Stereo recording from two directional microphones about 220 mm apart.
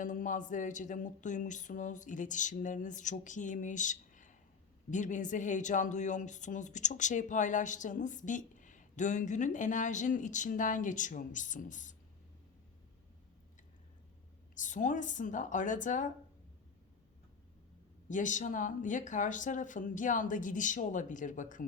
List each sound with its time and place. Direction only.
0.0 s speech: 35° left (ahead or behind)
14.5 s speech: 35° left (ahead or behind)
18.1 s speech: 35° left (ahead or behind)